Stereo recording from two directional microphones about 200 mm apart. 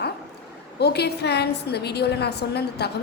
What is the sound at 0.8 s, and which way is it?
A woman's voice, 55° left (ahead or behind).